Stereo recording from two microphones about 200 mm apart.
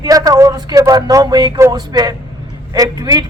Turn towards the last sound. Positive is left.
turn(degrees=-20)  # may be behind; listen again after turning